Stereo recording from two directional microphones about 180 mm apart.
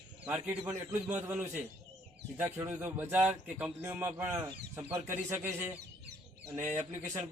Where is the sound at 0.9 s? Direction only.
10° right (ahead or behind).